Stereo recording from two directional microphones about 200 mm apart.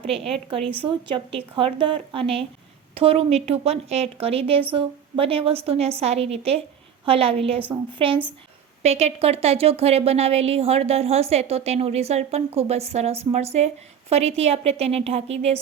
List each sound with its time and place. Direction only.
0.1 s a woman's voice: 30° right (ahead or behind)